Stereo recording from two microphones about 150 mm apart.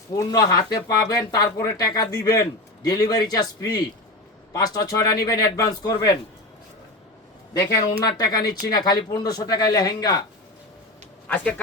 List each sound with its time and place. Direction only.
0.1 s speech: 25° left (ahead or behind)
7.5 s speech: 20° left (ahead or behind)
11.3 s a man's voice: 10° left (ahead or behind)